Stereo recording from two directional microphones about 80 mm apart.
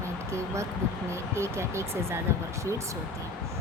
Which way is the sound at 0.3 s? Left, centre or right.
Right.